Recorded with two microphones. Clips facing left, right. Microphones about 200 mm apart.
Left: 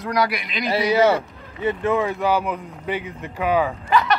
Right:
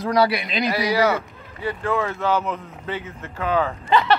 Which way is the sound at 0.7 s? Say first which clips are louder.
Left 4 dB; 25° left (ahead or behind).